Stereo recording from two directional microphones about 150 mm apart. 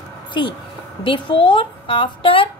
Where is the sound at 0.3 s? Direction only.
30° left (ahead or behind).